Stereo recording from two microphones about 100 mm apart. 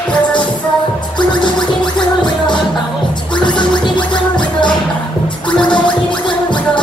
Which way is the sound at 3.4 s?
50° left (ahead or behind).